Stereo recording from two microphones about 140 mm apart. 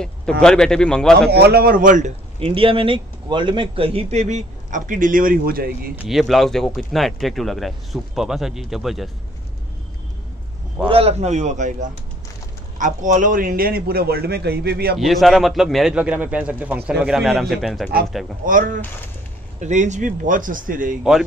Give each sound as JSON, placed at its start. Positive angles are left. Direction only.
{"t": 0.0, "sound": "speech", "side_deg": 5}
{"t": 1.5, "sound": "speech", "side_deg": -90}
{"t": 2.4, "sound": "a man's voice", "side_deg": -40}
{"t": 6.0, "sound": "speech", "side_deg": 0}
{"t": 10.9, "sound": "a man's voice", "side_deg": -45}
{"t": 15.0, "sound": "speech", "side_deg": 0}
{"t": 18.4, "sound": "speech", "side_deg": -70}
{"t": 19.6, "sound": "speech", "side_deg": -60}